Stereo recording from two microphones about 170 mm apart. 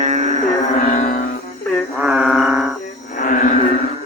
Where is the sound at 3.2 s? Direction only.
50° left (ahead or behind).